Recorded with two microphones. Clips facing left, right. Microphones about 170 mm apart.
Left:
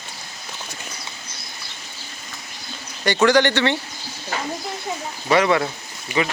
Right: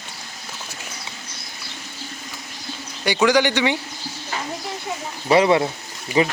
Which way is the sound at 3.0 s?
10° right (ahead or behind).